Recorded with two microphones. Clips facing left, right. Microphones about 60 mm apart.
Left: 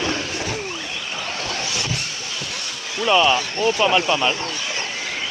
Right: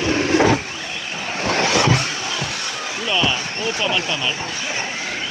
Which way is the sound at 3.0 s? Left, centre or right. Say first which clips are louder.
Left 5 dB; centre.